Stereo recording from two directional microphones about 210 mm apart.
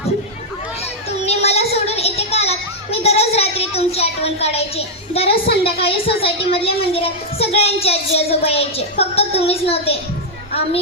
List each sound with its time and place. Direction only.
1.2 s child singing: 30° left (ahead or behind)
5.6 s a child's voice: 25° left (ahead or behind)